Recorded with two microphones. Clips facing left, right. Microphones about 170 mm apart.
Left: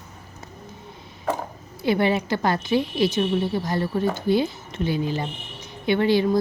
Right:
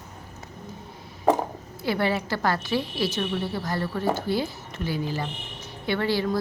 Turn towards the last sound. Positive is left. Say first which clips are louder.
# left 5 dB
turn(degrees=20)  # may be behind; listen again after turning